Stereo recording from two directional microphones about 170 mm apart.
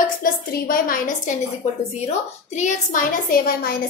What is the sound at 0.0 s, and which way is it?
A woman's voice, 55° left (ahead or behind).